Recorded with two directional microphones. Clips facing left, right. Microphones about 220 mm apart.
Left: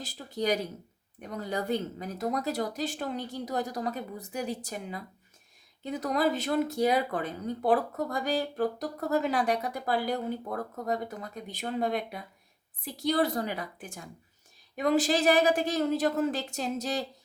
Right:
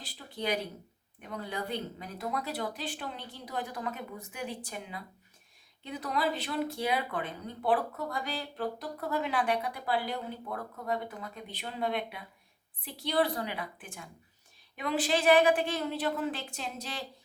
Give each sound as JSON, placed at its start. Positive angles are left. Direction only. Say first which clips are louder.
{"t": 0.0, "sound": "speech", "louder": "left 5 dB", "side_deg": 45}